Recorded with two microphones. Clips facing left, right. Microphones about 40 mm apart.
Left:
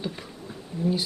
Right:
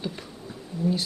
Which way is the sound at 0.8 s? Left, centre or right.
Left.